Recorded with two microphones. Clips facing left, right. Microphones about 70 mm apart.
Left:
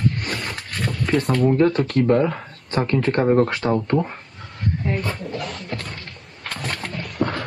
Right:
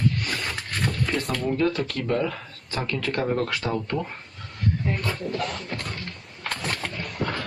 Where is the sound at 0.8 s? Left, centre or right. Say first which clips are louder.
Left 5 dB; centre.